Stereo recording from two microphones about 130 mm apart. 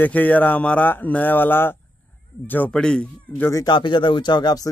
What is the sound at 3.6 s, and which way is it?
Speech, 35° left (ahead or behind).